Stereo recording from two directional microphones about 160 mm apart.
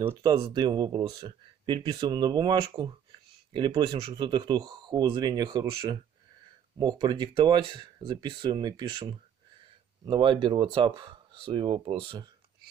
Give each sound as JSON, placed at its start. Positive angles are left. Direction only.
{"t": 0.4, "sound": "speech", "side_deg": -30}